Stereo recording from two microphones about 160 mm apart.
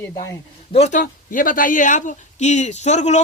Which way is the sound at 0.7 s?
45° left (ahead or behind).